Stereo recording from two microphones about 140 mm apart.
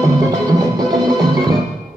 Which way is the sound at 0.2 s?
25° right (ahead or behind).